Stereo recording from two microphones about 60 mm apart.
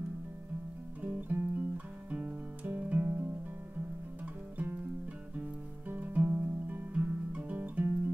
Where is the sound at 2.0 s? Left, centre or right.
Right.